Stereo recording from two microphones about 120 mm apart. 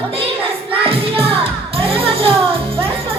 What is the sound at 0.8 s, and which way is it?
Music, 50° right (ahead or behind).